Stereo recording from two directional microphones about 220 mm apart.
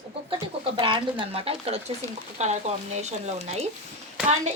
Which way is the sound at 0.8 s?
25° right (ahead or behind).